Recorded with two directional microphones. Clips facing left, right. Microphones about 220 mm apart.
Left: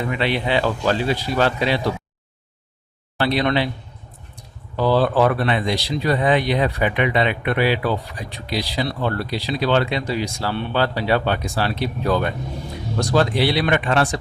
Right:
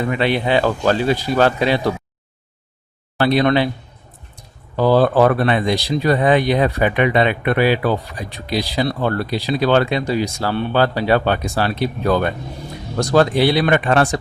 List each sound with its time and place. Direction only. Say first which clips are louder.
0.1 s speech: right 4 dB; 45° right (ahead or behind)
3.2 s speech: right 5 dB; 45° right (ahead or behind)
4.8 s speech: right 4 dB; 45° right (ahead or behind)